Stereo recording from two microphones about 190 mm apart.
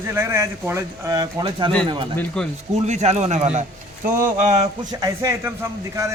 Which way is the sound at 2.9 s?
35° right (ahead or behind).